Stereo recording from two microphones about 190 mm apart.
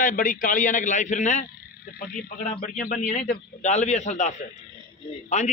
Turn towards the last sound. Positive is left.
turn(degrees=35)  # may be behind; listen again after turning